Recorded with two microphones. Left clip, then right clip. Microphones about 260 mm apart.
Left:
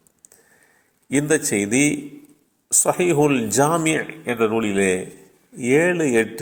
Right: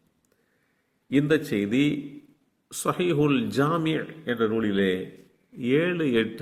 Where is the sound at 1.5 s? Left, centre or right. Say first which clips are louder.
Left 5 dB; centre.